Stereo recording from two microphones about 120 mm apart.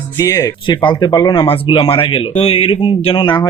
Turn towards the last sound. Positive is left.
turn(degrees=40)  # may be behind; listen again after turning